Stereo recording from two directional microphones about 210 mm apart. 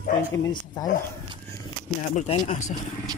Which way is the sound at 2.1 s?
35° left (ahead or behind).